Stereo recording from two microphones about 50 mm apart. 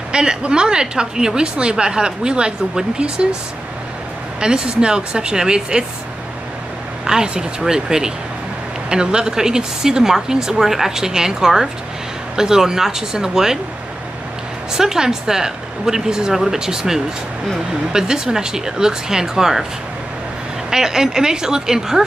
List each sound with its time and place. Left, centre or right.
0.1 s a woman's voice: centre
4.4 s a woman's voice: centre
7.1 s a woman's voice: centre
14.7 s a woman's voice: centre
20.7 s a woman's voice: centre